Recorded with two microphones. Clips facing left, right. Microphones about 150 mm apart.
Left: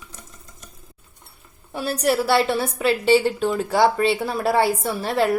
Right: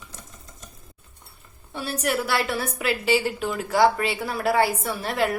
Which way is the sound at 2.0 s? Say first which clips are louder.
Left 6 dB; 30° left (ahead or behind).